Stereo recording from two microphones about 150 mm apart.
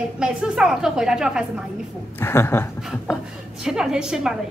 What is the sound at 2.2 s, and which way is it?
Speech, 15° left (ahead or behind).